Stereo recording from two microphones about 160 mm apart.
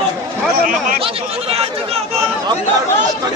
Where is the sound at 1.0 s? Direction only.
40° right (ahead or behind).